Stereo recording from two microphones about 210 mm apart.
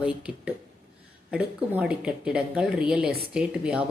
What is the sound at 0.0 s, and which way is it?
Speech, 5° right (ahead or behind).